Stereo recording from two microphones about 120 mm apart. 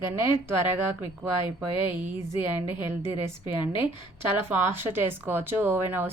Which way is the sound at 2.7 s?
40° left (ahead or behind).